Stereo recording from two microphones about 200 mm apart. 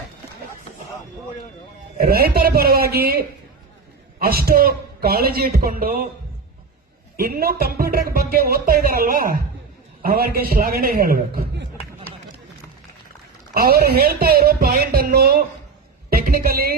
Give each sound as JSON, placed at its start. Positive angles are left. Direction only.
{"t": 2.0, "sound": "speech", "side_deg": -50}
{"t": 7.2, "sound": "speech", "side_deg": -50}
{"t": 13.5, "sound": "a woman's voice", "side_deg": -50}